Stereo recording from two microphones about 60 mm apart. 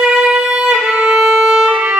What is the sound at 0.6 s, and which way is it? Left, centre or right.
Violin, centre.